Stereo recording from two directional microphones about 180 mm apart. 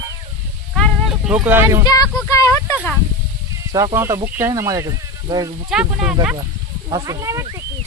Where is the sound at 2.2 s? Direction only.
20° left (ahead or behind).